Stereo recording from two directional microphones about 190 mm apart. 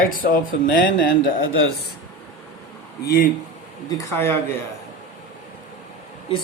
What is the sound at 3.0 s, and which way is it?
Speech, 55° left (ahead or behind).